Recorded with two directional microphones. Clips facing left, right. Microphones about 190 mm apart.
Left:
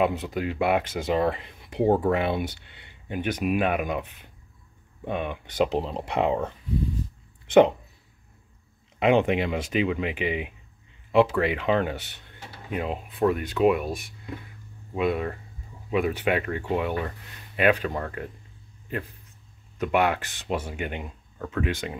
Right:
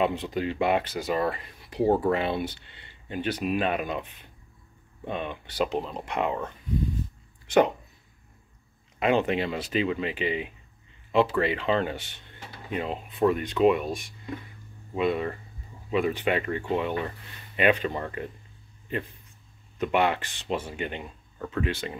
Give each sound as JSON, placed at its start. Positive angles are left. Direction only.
{"t": 0.0, "sound": "speech", "side_deg": 5}
{"t": 0.9, "sound": "speech", "side_deg": 20}
{"t": 1.9, "sound": "speech", "side_deg": 0}
{"t": 2.1, "sound": "speech", "side_deg": 10}
{"t": 5.7, "sound": "speech", "side_deg": 25}
{"t": 9.0, "sound": "speech", "side_deg": 15}
{"t": 19.8, "sound": "speech", "side_deg": 10}